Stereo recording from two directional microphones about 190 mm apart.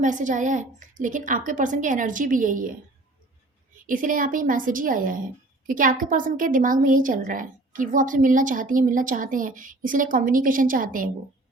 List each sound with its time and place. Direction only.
0.0 s a woman's voice: 40° right (ahead or behind)
3.8 s a woman's voice: 45° right (ahead or behind)